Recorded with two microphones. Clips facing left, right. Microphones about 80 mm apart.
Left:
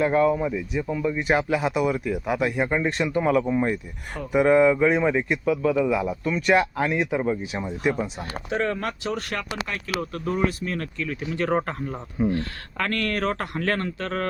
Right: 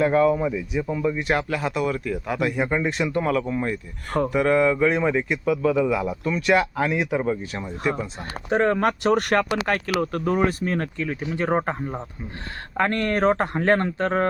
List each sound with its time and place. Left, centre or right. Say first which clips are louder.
0.0 s speech: right 1 dB; centre
8.4 s speech: right 6 dB; right
8.9 s speech: right 9 dB; right